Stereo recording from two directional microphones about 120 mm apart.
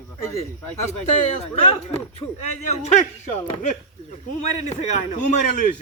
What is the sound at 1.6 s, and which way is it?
Speech, 55° left (ahead or behind).